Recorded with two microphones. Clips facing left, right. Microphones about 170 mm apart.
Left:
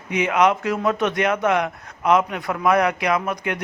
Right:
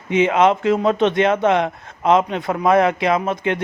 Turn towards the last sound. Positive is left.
turn(degrees=-25)  # may be behind; listen again after turning